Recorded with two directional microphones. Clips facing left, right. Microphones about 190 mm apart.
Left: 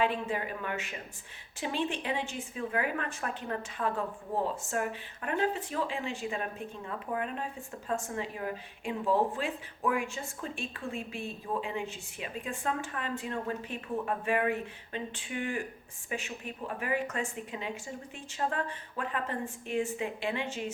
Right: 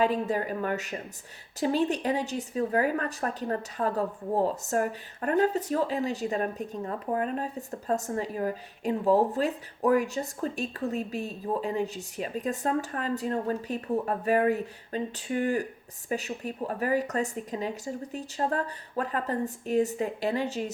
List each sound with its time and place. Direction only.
0.0 s a woman's voice: 40° right (ahead or behind)